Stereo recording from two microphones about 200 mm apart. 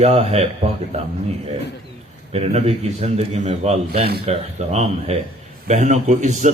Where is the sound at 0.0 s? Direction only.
30° right (ahead or behind).